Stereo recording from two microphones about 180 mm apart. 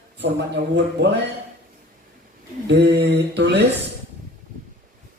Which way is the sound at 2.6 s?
70° right (ahead or behind).